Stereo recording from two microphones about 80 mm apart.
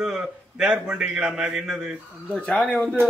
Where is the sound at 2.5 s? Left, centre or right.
Centre.